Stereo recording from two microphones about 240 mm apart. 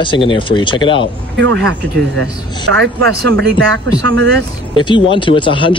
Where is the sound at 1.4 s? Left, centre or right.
Right.